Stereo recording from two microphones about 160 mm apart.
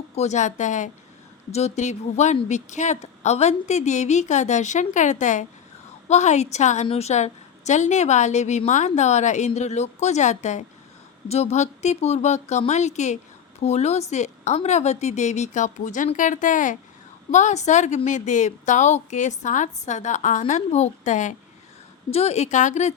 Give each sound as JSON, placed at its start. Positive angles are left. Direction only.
{"t": 0.2, "sound": "speech", "side_deg": 45}